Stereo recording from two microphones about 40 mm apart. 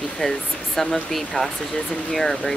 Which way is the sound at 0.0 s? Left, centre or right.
Centre.